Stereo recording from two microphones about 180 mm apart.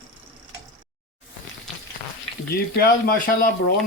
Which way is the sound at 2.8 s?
55° left (ahead or behind).